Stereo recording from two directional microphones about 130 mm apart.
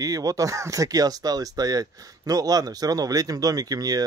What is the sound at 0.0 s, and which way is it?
Speech, 25° right (ahead or behind).